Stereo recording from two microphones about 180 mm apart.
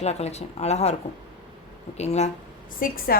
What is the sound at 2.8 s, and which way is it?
Speech, 55° left (ahead or behind).